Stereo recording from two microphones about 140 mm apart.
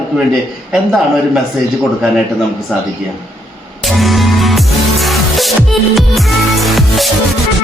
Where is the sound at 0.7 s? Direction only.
5° right (ahead or behind).